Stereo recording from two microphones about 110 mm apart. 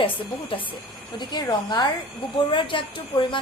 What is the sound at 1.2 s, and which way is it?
Speech, 40° left (ahead or behind).